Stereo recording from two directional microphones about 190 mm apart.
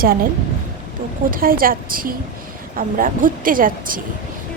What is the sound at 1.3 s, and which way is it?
A woman's voice, 50° right (ahead or behind).